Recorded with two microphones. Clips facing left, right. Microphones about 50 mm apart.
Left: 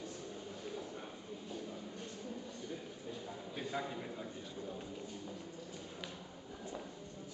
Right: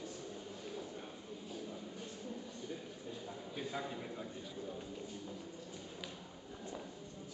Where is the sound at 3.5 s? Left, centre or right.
Centre.